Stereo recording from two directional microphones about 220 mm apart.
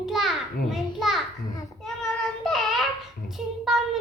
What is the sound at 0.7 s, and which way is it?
Speech, centre (ahead or behind).